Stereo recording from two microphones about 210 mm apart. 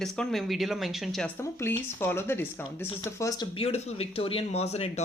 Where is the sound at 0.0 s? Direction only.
Centre (ahead or behind).